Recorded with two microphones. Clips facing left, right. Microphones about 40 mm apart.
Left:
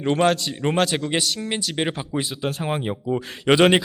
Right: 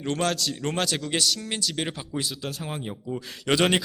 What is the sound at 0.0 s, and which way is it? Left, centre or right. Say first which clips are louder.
A man's voice: left 7 dB; left.